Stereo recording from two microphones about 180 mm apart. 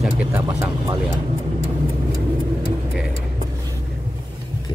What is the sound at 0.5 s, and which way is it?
Vehicle, 20° right (ahead or behind).